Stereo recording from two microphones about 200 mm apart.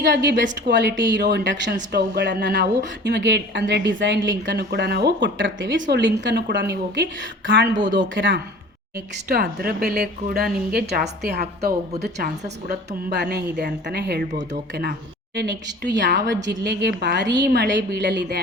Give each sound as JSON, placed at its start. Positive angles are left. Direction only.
{"t": 0.0, "sound": "speech", "side_deg": -60}
{"t": 9.3, "sound": "a woman's voice", "side_deg": -50}
{"t": 15.4, "sound": "speech", "side_deg": -60}